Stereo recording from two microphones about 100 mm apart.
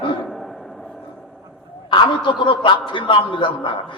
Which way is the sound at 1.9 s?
55° left (ahead or behind).